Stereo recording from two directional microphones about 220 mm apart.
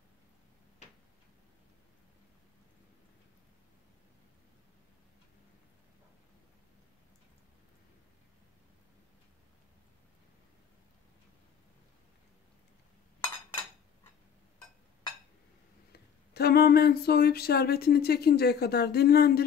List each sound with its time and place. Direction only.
15.9 s speech: 45° left (ahead or behind)